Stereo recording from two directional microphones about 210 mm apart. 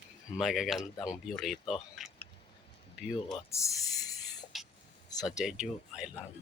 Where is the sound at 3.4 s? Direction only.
15° left (ahead or behind).